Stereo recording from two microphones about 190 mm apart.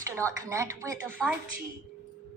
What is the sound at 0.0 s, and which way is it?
A woman's voice, 15° right (ahead or behind).